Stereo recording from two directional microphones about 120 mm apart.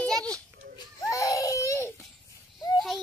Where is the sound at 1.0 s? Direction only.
25° left (ahead or behind).